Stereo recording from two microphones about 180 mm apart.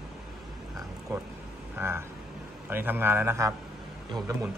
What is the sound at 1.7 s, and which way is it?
A man's voice, 15° right (ahead or behind).